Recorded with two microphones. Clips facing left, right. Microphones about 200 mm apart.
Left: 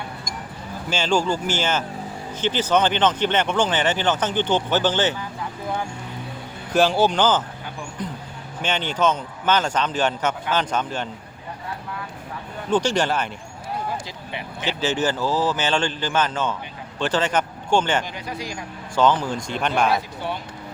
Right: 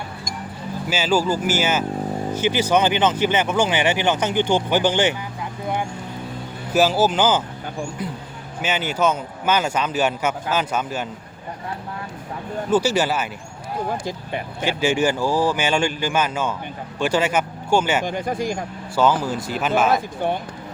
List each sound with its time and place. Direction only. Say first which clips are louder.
0.9 s speech: right 1 dB; 5° right (ahead or behind)
6.7 s speech: right 1 dB; 5° right (ahead or behind)
8.6 s speech: right 1 dB; 5° right (ahead or behind)
12.7 s speech: right 1 dB; 5° right (ahead or behind)
14.0 s speech: right 6 dB; 50° right (ahead or behind)
14.6 s speech: right 3 dB; 10° right (ahead or behind)
18.0 s speech: right 8 dB; 50° right (ahead or behind)
18.9 s speech: even; 10° right (ahead or behind)
19.9 s speech: right 4 dB; 50° right (ahead or behind)